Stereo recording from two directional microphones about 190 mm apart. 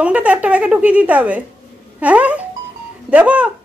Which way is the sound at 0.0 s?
5° right (ahead or behind).